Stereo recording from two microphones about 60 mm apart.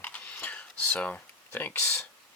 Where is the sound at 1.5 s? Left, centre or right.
Left.